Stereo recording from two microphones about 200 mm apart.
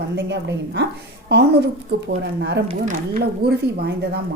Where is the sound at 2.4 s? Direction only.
60° right (ahead or behind).